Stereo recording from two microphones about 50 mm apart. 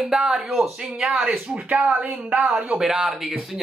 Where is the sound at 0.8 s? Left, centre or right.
Centre.